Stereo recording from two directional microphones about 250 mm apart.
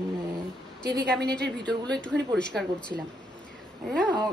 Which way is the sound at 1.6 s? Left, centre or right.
Centre.